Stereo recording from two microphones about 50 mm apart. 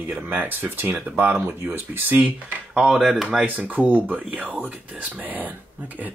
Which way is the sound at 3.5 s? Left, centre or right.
Right.